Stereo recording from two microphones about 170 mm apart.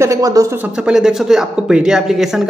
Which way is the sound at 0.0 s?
20° right (ahead or behind).